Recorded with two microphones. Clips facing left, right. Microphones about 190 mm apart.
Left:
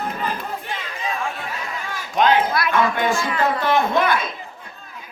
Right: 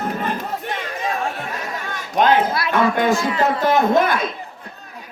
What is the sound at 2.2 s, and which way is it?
Speech, 45° right (ahead or behind).